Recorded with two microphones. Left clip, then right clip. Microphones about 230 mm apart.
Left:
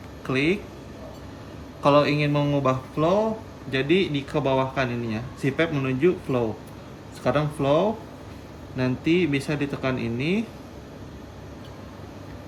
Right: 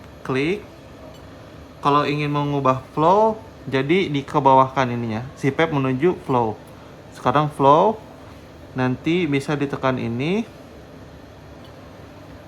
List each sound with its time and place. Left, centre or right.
0.2 s speech: centre
1.8 s speech: centre